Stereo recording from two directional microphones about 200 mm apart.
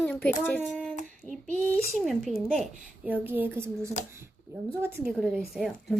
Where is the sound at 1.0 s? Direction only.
40° right (ahead or behind).